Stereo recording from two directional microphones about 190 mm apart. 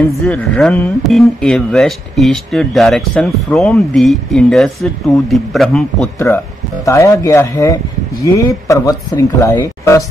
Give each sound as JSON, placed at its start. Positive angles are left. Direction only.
{"t": 0.0, "sound": "speech", "side_deg": 5}
{"t": 6.1, "sound": "speech", "side_deg": 15}